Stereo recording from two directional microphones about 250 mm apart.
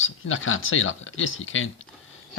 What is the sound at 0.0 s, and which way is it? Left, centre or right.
Speech, left.